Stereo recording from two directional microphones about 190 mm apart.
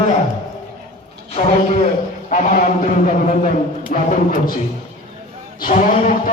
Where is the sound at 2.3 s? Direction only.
40° left (ahead or behind).